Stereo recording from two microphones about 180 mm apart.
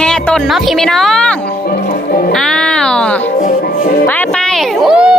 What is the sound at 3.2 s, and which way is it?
Music, 45° left (ahead or behind).